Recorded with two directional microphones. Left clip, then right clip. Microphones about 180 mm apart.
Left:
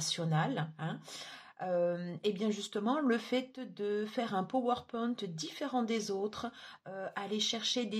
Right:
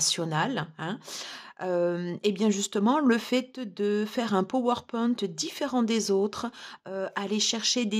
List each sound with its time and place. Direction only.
0.0 s speech: 50° right (ahead or behind)